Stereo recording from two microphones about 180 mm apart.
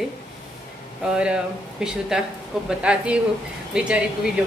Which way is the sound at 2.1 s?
5° right (ahead or behind).